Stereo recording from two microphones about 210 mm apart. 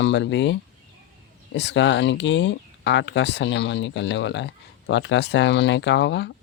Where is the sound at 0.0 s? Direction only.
60° left (ahead or behind).